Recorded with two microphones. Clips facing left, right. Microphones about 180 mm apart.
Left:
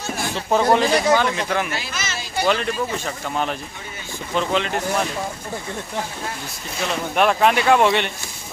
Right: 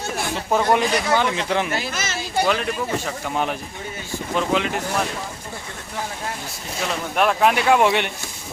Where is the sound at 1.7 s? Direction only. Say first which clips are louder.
Right 3 dB; 50° right (ahead or behind).